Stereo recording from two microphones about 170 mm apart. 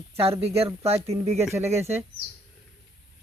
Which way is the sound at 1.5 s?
15° right (ahead or behind).